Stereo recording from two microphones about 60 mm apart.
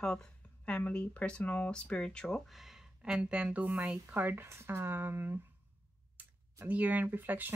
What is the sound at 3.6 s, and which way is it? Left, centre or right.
Speech, right.